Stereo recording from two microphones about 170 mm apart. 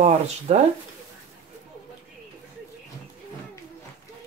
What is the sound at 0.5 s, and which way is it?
Speech, 40° right (ahead or behind).